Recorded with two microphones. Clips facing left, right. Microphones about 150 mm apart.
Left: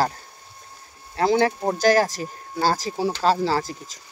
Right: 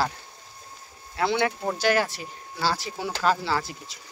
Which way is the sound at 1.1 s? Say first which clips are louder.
Left 5 dB; 35° left (ahead or behind).